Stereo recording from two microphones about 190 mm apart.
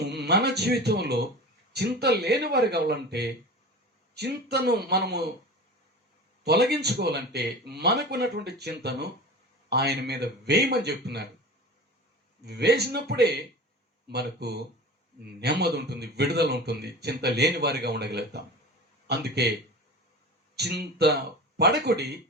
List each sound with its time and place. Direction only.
0.0 s a man's voice: 60° right (ahead or behind)
6.4 s a man's voice: 60° right (ahead or behind)
12.5 s a man's voice: 60° right (ahead or behind)
20.6 s a man's voice: 60° right (ahead or behind)